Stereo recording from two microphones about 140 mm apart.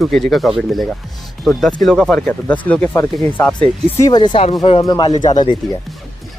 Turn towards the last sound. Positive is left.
turn(degrees=30)  # may be behind; listen again after turning